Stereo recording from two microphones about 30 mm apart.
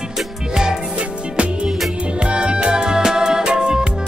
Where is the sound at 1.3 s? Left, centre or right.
Right.